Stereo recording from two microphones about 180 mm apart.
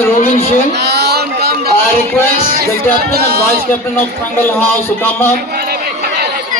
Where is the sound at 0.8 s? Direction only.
65° right (ahead or behind).